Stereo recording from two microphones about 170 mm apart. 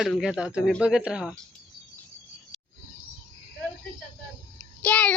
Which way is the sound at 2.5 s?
Centre (ahead or behind).